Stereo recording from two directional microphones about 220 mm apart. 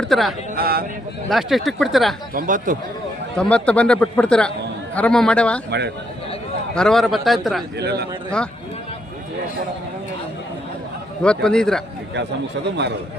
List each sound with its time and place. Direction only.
0.0 s speech: centre (ahead or behind)
0.5 s speech: 45° right (ahead or behind)
1.3 s speech: centre (ahead or behind)
2.3 s speech: 40° right (ahead or behind)
3.3 s speech: 5° left (ahead or behind)
6.7 s speech: centre (ahead or behind)
7.8 s speech: 45° right (ahead or behind)
11.2 s speech: 5° left (ahead or behind)
12.6 s speech: 50° right (ahead or behind)